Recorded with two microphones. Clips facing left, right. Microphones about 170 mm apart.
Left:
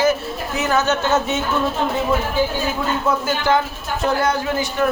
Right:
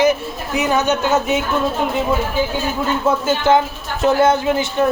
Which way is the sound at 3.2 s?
20° right (ahead or behind).